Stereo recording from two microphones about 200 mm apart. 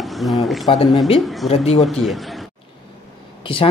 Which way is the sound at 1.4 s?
30° left (ahead or behind).